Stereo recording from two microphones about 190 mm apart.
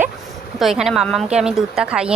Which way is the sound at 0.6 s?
Centre (ahead or behind).